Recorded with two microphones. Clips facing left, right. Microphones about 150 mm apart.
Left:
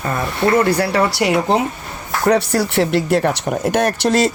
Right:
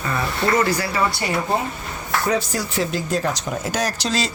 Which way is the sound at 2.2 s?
70° left (ahead or behind).